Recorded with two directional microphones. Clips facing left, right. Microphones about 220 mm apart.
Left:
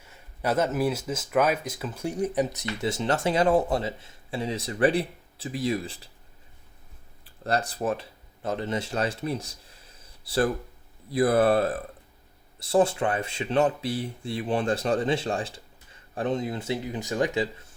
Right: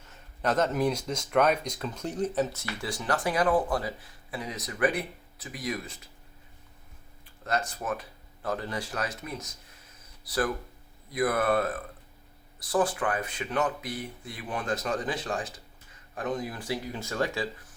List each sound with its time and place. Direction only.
0.0 s speech: 10° left (ahead or behind); by 6.1 s 30° left (ahead or behind)
7.4 s speech: 35° left (ahead or behind)